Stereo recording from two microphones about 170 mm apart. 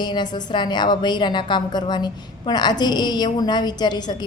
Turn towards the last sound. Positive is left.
turn(degrees=25)  # may be behind; listen again after turning